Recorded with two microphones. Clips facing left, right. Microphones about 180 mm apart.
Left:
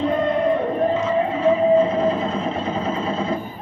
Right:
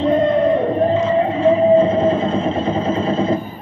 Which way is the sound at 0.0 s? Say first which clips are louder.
Right 5 dB; 25° right (ahead or behind).